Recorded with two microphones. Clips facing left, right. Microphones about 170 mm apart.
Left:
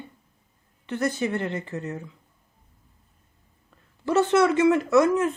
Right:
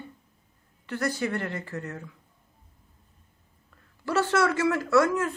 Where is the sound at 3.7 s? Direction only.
20° left (ahead or behind).